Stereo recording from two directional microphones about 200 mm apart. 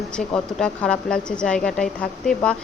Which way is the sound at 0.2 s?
5° left (ahead or behind).